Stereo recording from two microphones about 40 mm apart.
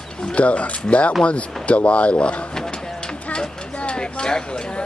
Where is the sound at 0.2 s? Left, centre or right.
Left.